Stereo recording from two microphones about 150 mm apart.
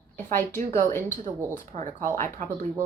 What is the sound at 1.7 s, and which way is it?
Speech, 55° right (ahead or behind).